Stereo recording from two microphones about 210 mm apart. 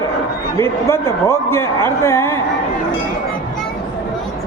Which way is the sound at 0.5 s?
10° left (ahead or behind).